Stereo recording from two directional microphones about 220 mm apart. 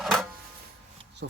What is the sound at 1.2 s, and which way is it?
Speech, 50° right (ahead or behind).